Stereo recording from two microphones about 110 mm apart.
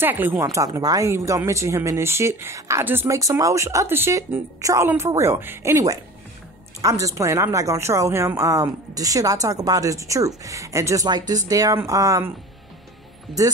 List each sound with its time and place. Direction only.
0.0 s speech: 15° right (ahead or behind)
0.4 s speech: 30° right (ahead or behind)